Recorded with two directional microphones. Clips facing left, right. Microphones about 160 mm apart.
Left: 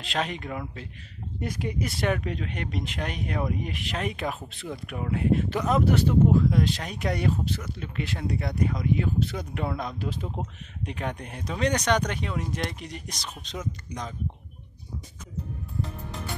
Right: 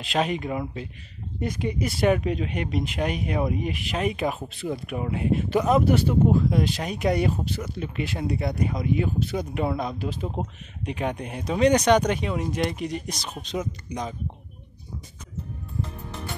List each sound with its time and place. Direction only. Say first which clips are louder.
0.0 s speech: right 5 dB; 10° right (ahead or behind)
1.4 s speech: right 3 dB; centre (ahead or behind)
2.0 s speech: right 8 dB; 15° right (ahead or behind)